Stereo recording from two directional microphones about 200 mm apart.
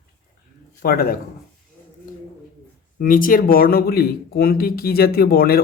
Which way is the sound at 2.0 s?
45° left (ahead or behind).